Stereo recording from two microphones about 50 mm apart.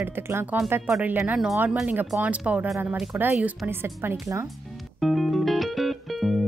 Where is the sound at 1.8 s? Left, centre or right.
Right.